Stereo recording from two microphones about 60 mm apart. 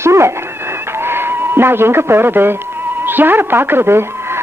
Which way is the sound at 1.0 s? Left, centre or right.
Right.